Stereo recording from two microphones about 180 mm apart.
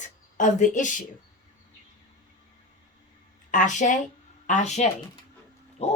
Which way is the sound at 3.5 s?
45° left (ahead or behind).